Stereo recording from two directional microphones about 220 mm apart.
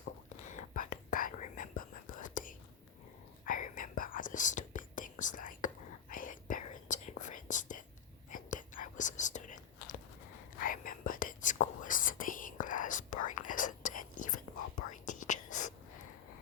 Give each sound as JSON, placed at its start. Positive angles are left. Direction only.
{"t": 0.4, "sound": "whispering", "side_deg": 35}
{"t": 10.6, "sound": "whispering", "side_deg": 40}